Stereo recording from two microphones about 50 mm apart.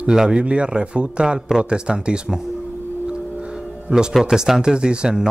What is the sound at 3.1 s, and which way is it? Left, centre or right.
Music, centre.